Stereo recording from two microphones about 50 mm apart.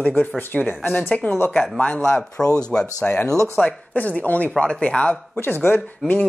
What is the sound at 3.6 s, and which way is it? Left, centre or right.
Speech, left.